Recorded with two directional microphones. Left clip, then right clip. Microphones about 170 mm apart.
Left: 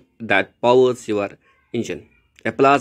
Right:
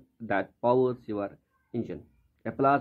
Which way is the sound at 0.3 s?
20° left (ahead or behind).